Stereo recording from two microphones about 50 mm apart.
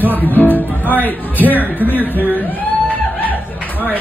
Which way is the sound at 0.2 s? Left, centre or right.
Left.